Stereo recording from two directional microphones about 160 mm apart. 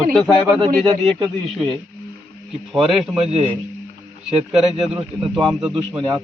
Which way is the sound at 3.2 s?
40° right (ahead or behind).